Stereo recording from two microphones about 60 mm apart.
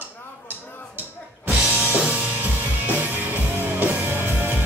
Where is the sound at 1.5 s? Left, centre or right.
Centre.